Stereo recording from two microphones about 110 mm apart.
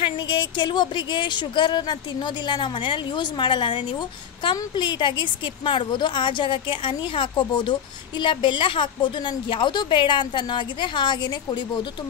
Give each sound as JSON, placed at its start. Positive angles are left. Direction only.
{"t": 0.0, "sound": "speech", "side_deg": 50}